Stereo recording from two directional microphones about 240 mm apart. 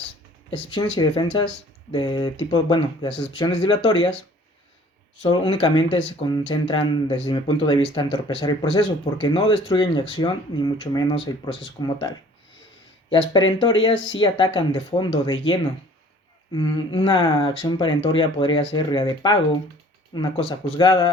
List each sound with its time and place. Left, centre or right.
0.9 s speech: centre
5.2 s speech: left
13.9 s speech: left
14.2 s speech: centre